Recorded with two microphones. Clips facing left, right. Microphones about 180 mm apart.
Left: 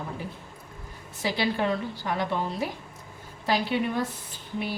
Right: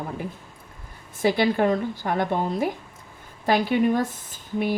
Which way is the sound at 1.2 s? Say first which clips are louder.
Right 6 dB; 50° right (ahead or behind).